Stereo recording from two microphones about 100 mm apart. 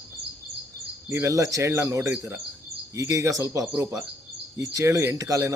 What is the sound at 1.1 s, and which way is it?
Speech, 30° right (ahead or behind).